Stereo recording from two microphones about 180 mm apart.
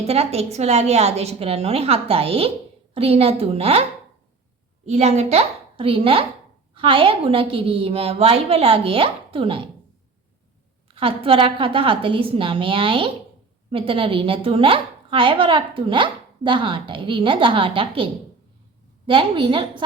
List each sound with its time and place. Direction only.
0.1 s a woman's voice: 35° right (ahead or behind)
4.9 s a woman's voice: 35° right (ahead or behind)
10.9 s speech: 30° right (ahead or behind)